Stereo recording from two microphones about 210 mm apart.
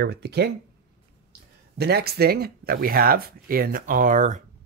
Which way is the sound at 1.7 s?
50° right (ahead or behind).